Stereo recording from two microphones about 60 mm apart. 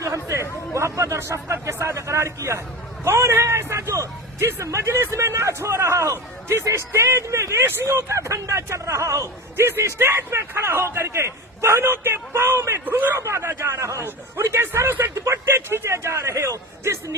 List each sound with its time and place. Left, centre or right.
0.0 s chatter: right
0.7 s a sound: right
1.6 s speech: right
3.0 s vehicle: right
4.4 s a man's voice: right
12.8 s speech: right
13.1 s a man's voice: right